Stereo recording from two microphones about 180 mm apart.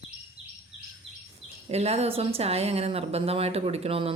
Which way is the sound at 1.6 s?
35° right (ahead or behind).